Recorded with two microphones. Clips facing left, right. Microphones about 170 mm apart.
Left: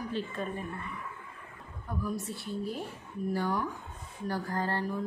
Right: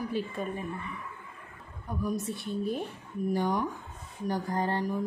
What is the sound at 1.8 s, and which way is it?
A woman's voice, 20° right (ahead or behind).